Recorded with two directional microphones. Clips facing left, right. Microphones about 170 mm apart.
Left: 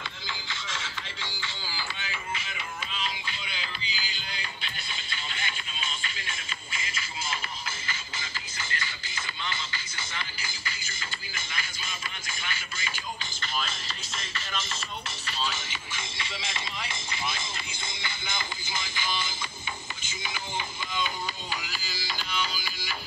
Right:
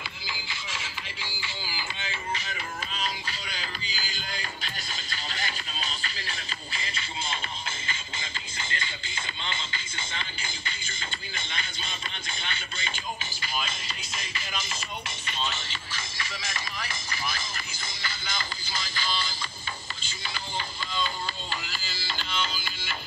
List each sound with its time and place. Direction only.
0.3 s music: 10° right (ahead or behind)
2.3 s music: 40° right (ahead or behind)
13.5 s music: 5° right (ahead or behind)
15.3 s music: 5° left (ahead or behind)
16.0 s music: 25° left (ahead or behind); by 22.9 s 10° left (ahead or behind)